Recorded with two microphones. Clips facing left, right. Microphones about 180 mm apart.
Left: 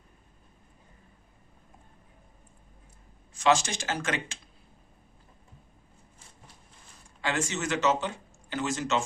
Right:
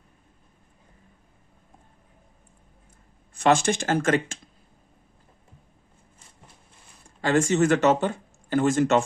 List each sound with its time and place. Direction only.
3.3 s speech: 55° right (ahead or behind)
7.2 s speech: 45° right (ahead or behind)